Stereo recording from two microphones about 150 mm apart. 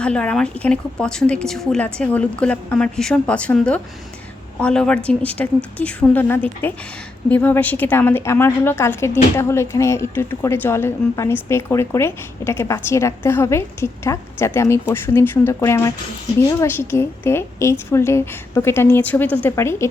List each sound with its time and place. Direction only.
0.0 s a woman's voice: 5° left (ahead or behind)